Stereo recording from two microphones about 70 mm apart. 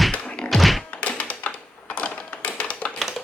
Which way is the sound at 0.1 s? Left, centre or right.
Centre.